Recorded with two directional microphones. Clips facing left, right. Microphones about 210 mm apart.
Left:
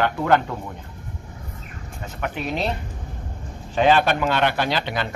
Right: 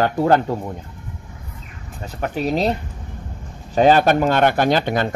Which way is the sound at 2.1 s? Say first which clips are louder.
Right 6 dB; 35° right (ahead or behind).